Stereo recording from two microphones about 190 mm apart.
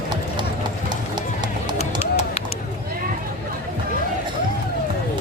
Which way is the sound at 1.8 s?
35° left (ahead or behind).